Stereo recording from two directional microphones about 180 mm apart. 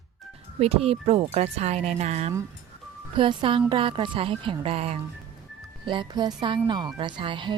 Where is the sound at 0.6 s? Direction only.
35° right (ahead or behind).